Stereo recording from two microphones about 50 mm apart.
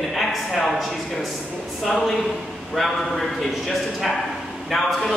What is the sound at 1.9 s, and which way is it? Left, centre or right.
Speech, centre.